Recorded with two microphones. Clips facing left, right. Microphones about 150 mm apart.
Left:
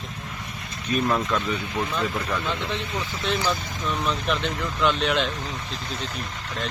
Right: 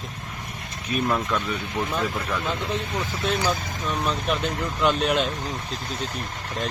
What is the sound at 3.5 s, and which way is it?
Speech, 10° right (ahead or behind).